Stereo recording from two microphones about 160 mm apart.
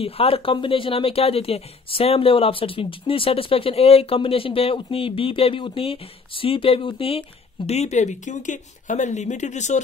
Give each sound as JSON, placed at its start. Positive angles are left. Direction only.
{"t": 0.0, "sound": "speech", "side_deg": 35}